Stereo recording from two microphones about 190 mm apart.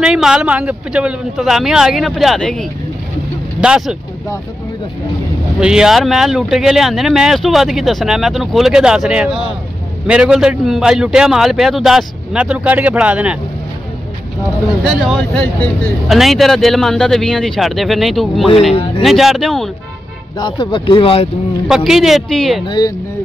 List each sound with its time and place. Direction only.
0.0 s speech: 5° right (ahead or behind)
5.6 s speech: 5° right (ahead or behind)
14.8 s speech: centre (ahead or behind)
18.7 s speech: 30° left (ahead or behind)
19.0 s speech: centre (ahead or behind)
20.3 s speech: 25° left (ahead or behind)
21.6 s speech: centre (ahead or behind)
22.7 s speech: 20° left (ahead or behind)